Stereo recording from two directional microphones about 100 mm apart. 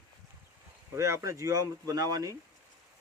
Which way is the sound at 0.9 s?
30° right (ahead or behind).